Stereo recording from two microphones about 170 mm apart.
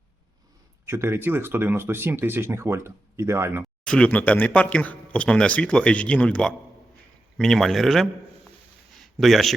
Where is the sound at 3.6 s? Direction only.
5° left (ahead or behind).